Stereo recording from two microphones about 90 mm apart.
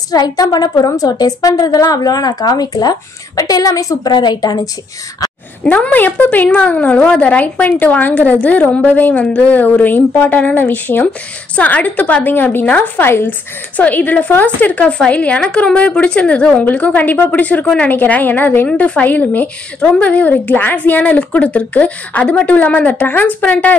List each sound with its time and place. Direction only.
0.1 s a woman's voice: 45° left (ahead or behind)
4.1 s a woman's voice: 55° left (ahead or behind)
5.6 s a woman's voice: 15° left (ahead or behind)